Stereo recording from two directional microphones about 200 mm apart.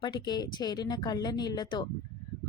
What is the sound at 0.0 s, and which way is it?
A woman's voice, 20° left (ahead or behind).